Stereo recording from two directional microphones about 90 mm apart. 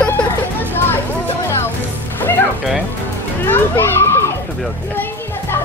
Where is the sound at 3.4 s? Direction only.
25° left (ahead or behind).